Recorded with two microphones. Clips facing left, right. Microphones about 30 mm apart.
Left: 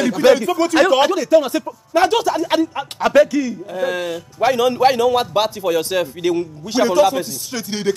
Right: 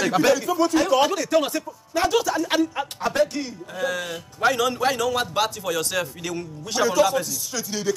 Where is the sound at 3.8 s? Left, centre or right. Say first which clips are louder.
Left 5 dB; left.